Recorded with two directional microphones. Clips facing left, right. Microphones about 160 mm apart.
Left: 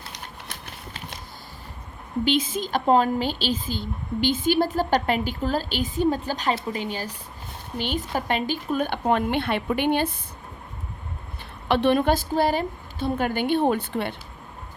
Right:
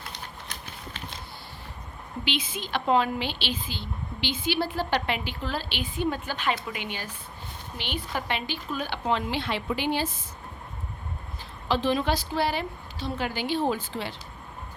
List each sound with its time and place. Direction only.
2.2 s speech: 45° left (ahead or behind)
11.7 s speech: 60° left (ahead or behind)